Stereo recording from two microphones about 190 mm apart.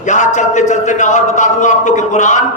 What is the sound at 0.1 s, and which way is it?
Speech, 40° left (ahead or behind).